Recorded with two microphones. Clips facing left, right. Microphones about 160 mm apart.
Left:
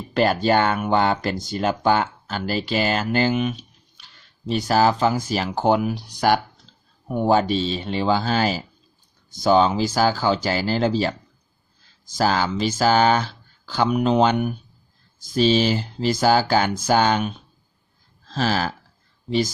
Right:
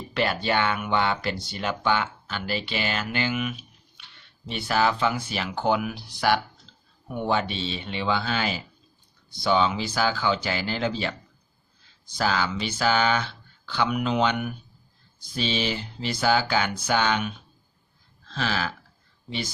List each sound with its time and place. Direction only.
0.1 s speech: 40° left (ahead or behind)
12.1 s speech: 40° left (ahead or behind)